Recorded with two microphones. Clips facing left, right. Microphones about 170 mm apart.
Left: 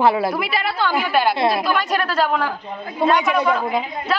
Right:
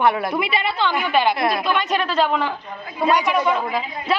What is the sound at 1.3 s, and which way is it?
Speech, 25° left (ahead or behind).